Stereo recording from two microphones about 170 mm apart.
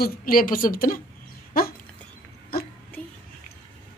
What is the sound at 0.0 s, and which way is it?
A woman's voice, 60° left (ahead or behind).